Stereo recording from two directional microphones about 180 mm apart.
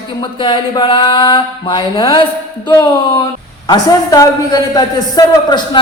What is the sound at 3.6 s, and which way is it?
Speech, 20° left (ahead or behind).